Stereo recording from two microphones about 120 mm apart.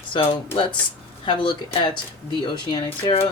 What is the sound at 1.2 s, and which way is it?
Speech, 40° left (ahead or behind).